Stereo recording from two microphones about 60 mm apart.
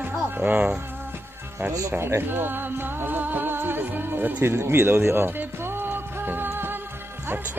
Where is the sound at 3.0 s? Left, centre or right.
Right.